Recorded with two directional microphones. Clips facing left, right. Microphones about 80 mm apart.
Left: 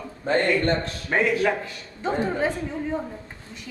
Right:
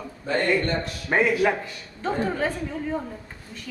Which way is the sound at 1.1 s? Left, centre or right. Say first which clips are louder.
Right 1 dB; centre.